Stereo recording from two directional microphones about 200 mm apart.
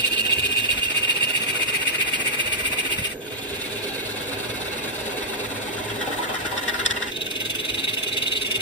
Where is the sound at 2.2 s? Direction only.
25° right (ahead or behind).